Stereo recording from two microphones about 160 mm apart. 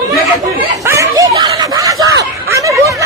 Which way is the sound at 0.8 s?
20° right (ahead or behind).